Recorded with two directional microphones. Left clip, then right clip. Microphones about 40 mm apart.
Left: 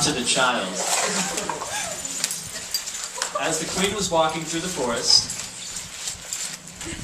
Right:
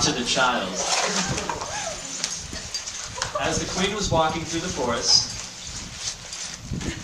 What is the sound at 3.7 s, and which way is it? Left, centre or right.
Speech, centre.